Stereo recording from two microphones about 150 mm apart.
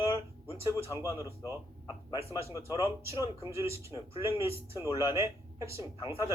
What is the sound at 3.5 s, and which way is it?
A man's voice, 20° right (ahead or behind).